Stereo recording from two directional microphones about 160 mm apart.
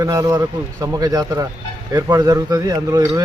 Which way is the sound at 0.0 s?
20° right (ahead or behind).